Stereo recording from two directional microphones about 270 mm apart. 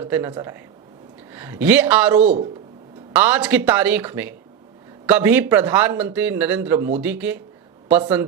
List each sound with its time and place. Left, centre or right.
0.0 s speech: centre
2.2 s speech: right
3.1 s speech: centre